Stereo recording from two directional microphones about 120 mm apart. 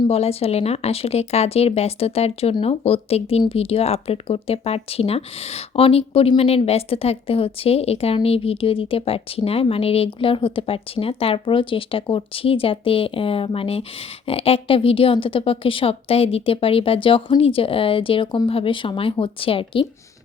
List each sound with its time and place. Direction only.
0.1 s speech: 55° left (ahead or behind)